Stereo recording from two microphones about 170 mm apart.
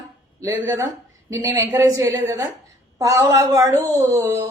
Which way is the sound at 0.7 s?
20° right (ahead or behind).